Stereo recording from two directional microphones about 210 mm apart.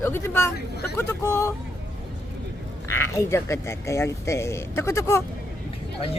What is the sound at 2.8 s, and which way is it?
Speech, 10° left (ahead or behind).